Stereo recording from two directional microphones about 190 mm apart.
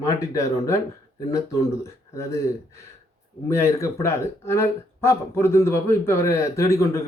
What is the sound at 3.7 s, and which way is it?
Speech, 15° left (ahead or behind).